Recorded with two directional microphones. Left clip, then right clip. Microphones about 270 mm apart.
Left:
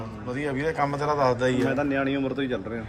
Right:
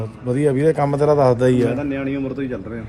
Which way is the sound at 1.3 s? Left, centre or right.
Right.